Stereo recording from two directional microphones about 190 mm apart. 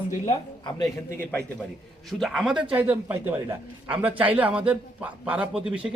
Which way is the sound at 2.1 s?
Centre (ahead or behind).